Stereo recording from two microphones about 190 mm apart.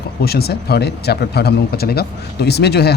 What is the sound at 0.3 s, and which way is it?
Speech, 55° left (ahead or behind).